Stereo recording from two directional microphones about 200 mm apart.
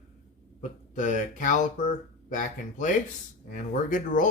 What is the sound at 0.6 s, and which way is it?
Speech, 40° left (ahead or behind).